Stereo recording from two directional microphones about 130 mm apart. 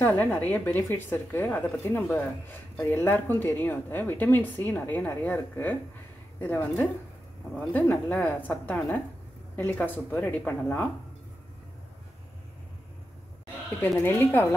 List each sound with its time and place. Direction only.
0.0 s speech: 15° left (ahead or behind)
13.9 s speech: 15° left (ahead or behind)